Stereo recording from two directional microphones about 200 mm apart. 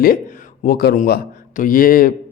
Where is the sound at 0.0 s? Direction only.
45° left (ahead or behind).